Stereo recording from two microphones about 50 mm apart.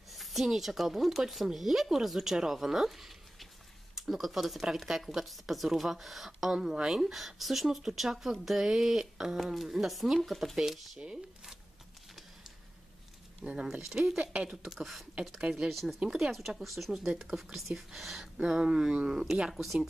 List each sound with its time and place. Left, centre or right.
0.1 s speech: centre
11.0 s speech: centre
13.4 s speech: centre
14.2 s speech: right
14.6 s speech: centre
15.7 s speech: centre
19.5 s speech: centre